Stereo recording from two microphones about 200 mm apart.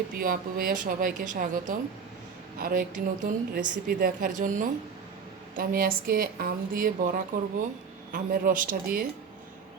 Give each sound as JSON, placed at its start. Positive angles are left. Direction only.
{"t": 0.2, "sound": "a woman's voice", "side_deg": -45}